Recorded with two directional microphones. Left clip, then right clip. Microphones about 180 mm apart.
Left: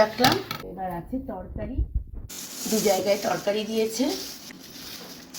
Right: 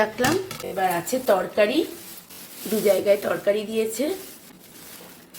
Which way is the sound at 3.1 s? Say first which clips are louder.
Right 4 dB; 35° right (ahead or behind).